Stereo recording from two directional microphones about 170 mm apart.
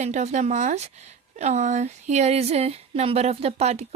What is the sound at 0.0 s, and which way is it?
Speech, 45° right (ahead or behind).